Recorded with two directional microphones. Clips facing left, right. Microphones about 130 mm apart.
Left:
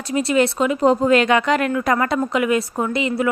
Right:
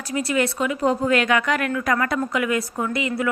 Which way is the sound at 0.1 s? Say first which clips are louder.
Left 5 dB; 25° left (ahead or behind).